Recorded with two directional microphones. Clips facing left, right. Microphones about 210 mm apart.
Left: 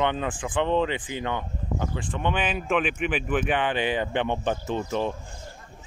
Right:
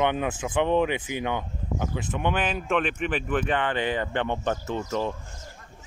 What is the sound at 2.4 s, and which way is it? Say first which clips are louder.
Speech: even; 5° left (ahead or behind).